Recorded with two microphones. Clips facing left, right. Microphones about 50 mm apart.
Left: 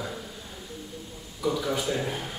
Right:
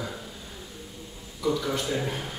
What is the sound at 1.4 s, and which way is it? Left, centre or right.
Speech, centre.